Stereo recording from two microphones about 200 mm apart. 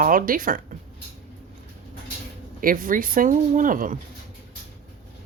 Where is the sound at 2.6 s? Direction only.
45° right (ahead or behind).